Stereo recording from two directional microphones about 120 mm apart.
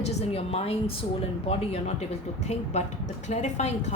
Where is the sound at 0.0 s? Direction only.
65° left (ahead or behind).